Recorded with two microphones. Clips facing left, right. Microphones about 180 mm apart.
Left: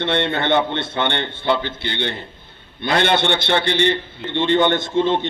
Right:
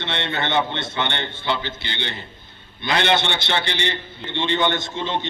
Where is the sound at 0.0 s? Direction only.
55° left (ahead or behind).